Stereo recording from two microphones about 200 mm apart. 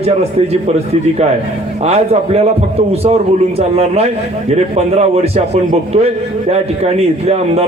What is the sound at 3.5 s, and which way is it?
A man's voice, 30° right (ahead or behind).